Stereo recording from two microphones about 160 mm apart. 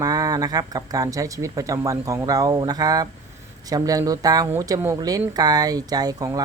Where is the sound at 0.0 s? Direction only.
25° right (ahead or behind).